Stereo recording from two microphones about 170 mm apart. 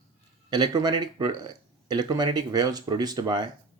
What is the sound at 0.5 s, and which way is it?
Speech, 25° right (ahead or behind).